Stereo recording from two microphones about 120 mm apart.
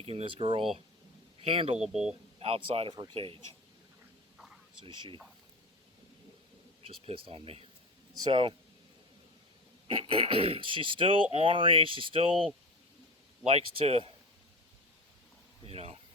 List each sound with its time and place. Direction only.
0.0 s speech: 50° right (ahead or behind)
1.8 s speech: 5° right (ahead or behind)
2.4 s speech: 50° right (ahead or behind)
2.9 s speech: 35° right (ahead or behind)
4.4 s a sound: 5° right (ahead or behind)
4.9 s speech: 40° right (ahead or behind)
7.0 s speech: 50° right (ahead or behind)
9.8 s speech: 50° right (ahead or behind)
13.4 s speech: 60° right (ahead or behind)
15.6 s speech: 55° right (ahead or behind)